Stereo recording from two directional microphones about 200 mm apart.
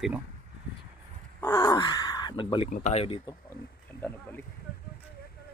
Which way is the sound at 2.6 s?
40° left (ahead or behind).